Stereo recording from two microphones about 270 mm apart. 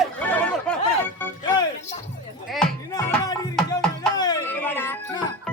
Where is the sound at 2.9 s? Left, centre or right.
Centre.